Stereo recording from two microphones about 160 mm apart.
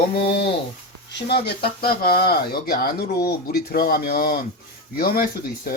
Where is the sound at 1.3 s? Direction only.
80° left.